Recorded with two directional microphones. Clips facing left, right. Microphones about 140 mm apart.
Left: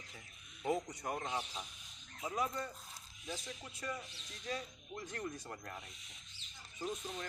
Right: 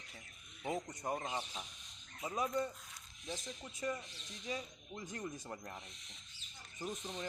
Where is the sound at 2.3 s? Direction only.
20° right (ahead or behind).